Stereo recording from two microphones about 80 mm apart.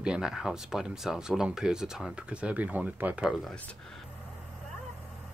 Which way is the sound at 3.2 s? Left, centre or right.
Centre.